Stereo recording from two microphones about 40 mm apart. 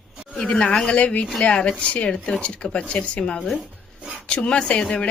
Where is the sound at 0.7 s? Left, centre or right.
Centre.